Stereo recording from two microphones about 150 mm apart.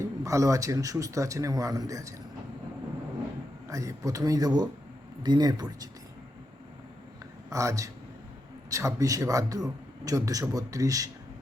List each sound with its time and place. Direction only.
0.0 s speech: 20° right (ahead or behind)
3.7 s speech: 20° right (ahead or behind)
7.5 s speech: 20° right (ahead or behind)